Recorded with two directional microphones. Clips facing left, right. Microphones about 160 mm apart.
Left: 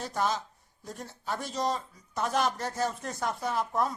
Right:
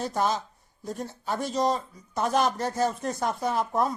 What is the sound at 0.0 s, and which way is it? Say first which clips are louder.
Speech: right 4 dB; 20° right (ahead or behind).